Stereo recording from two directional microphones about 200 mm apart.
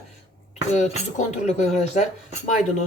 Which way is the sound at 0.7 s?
35° left (ahead or behind).